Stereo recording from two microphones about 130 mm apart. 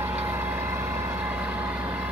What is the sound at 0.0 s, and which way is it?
Vehicle, 15° right (ahead or behind).